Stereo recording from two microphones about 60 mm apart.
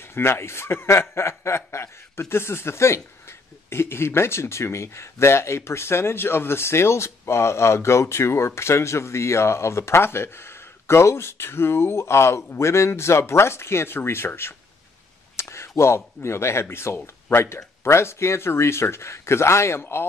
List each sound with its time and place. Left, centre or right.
0.0 s speech: left
15.5 s speech: left